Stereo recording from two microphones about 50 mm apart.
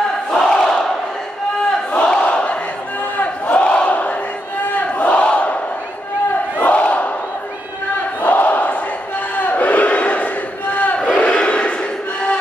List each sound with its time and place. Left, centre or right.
0.3 s crowd: centre
2.0 s battle cry: left
6.6 s battle cry: left
8.2 s battle cry: left
11.2 s battle cry: centre